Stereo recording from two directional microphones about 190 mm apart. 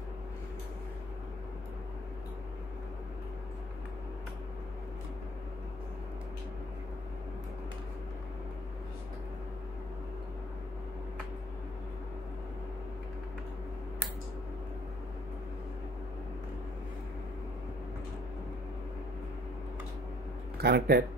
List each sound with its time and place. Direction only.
20.6 s speech: 55° right (ahead or behind)